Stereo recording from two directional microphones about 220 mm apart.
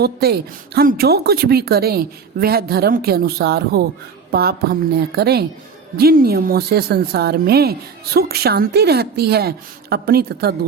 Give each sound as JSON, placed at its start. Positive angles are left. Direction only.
{"t": 0.0, "sound": "a woman's voice", "side_deg": -45}